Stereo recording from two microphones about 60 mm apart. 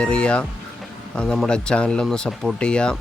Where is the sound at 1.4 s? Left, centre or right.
Centre.